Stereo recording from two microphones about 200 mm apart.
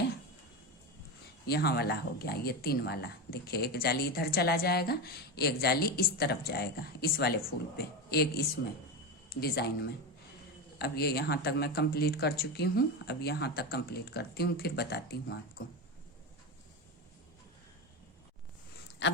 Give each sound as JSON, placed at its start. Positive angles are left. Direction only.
{"t": 1.5, "sound": "speech", "side_deg": 55}
{"t": 10.8, "sound": "speech", "side_deg": 55}